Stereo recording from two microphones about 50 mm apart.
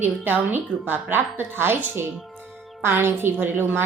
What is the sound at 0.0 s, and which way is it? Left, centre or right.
A woman's voice, right.